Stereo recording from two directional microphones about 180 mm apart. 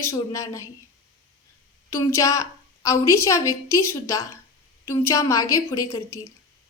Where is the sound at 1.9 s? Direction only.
15° left (ahead or behind).